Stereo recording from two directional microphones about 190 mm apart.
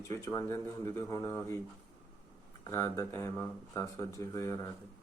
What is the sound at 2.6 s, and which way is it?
A man's voice, 15° left (ahead or behind).